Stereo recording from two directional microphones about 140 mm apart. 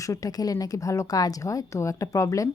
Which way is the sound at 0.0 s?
25° left (ahead or behind).